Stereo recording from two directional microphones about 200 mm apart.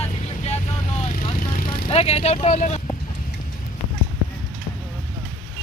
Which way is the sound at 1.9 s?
30° left (ahead or behind).